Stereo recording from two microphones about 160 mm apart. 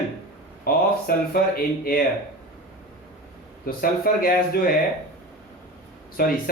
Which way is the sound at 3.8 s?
65° left (ahead or behind).